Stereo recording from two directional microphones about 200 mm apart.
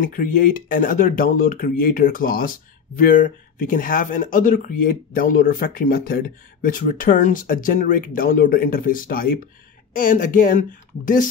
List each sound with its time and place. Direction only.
0.0 s speech: 45° left (ahead or behind)